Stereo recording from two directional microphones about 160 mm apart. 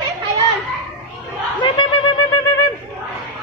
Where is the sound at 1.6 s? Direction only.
30° left (ahead or behind).